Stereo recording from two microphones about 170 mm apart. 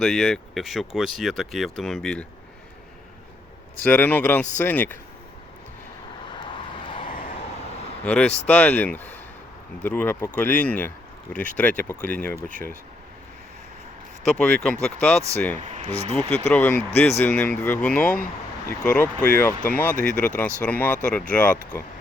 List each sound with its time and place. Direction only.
0.0 s speech: centre (ahead or behind)
3.8 s speech: 10° left (ahead or behind)
6.8 s vehicle: 30° left (ahead or behind)
8.0 s speech: 5° left (ahead or behind)
14.3 s speech: 5° left (ahead or behind)
15.5 s speech: 45° right (ahead or behind)
16.5 s speech: 10° left (ahead or behind)